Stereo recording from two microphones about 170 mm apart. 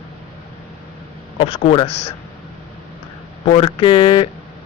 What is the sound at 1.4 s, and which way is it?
Speech, 30° left (ahead or behind).